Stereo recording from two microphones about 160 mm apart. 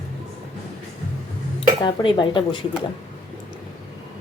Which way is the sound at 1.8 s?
30° left (ahead or behind).